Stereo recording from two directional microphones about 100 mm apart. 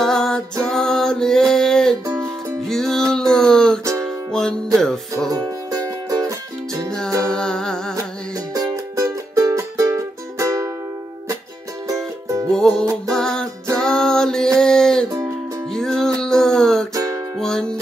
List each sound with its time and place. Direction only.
0.0 s music: 5° left (ahead or behind)
2.0 s music: 30° right (ahead or behind)
2.7 s music: 5° left (ahead or behind)
5.3 s music: 40° right (ahead or behind)
7.2 s music: 5° left (ahead or behind)
8.5 s music: 40° right (ahead or behind)
11.9 s music: 35° right (ahead or behind)
12.5 s music: 5° left (ahead or behind)
16.9 s music: 35° right (ahead or behind)
17.4 s music: 5° left (ahead or behind)